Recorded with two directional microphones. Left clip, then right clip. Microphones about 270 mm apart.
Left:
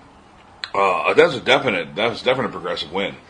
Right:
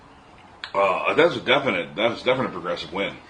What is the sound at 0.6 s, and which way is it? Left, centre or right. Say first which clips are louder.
A man's voice: left 3 dB; left.